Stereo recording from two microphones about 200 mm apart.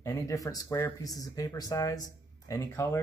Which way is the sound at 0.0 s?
15° left (ahead or behind).